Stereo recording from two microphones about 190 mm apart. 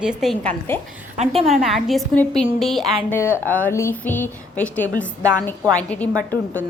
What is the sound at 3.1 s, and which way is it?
A woman's voice, 10° left (ahead or behind).